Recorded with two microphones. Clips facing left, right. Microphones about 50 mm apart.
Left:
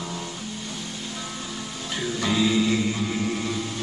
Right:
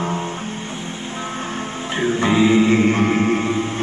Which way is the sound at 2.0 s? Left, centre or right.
Right.